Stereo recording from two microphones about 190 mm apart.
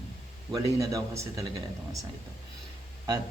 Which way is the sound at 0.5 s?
15° right (ahead or behind).